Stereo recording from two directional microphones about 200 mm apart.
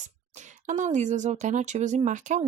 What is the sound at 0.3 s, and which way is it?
Speech, 35° right (ahead or behind).